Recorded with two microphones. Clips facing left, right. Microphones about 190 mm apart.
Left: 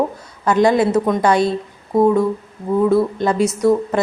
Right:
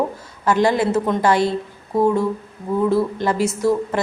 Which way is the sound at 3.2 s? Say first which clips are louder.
Left 3 dB; 20° left (ahead or behind).